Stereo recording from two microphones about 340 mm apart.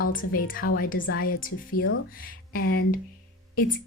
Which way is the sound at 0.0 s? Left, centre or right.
Left.